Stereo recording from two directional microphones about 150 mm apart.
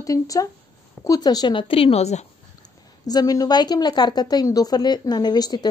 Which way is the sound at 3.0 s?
25° left (ahead or behind).